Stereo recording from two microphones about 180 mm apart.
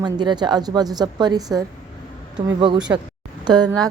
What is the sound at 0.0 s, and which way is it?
A woman's voice, 25° right (ahead or behind).